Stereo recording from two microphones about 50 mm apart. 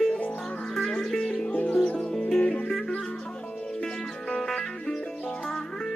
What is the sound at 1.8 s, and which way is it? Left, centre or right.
Music, centre.